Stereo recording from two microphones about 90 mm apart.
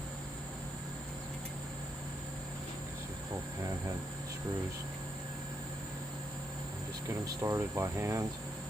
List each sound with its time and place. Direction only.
7.4 s speech: 30° right (ahead or behind)